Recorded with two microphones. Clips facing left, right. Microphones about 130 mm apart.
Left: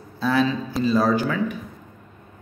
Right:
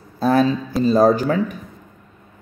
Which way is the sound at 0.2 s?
45° right (ahead or behind).